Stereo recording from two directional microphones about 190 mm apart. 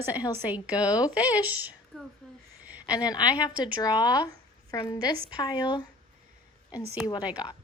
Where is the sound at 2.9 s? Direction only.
20° left (ahead or behind).